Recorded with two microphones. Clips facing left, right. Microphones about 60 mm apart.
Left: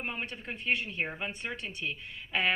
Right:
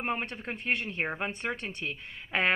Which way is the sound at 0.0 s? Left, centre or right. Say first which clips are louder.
Right 5 dB; right.